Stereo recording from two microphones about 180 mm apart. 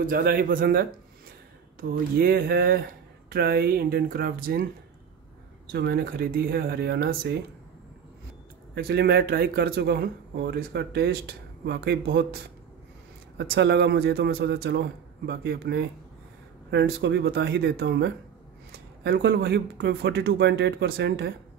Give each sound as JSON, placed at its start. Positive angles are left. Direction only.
{"t": 0.0, "sound": "speech", "side_deg": -50}
{"t": 5.7, "sound": "speech", "side_deg": -60}
{"t": 8.7, "sound": "speech", "side_deg": -60}
{"t": 13.4, "sound": "speech", "side_deg": -70}